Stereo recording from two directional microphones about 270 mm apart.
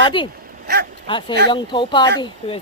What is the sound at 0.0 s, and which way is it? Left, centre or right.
Speech, centre.